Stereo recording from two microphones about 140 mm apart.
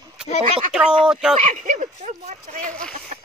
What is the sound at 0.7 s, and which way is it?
Speech, 5° right (ahead or behind).